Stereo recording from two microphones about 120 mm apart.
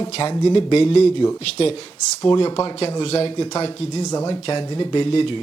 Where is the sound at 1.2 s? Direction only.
30° left (ahead or behind).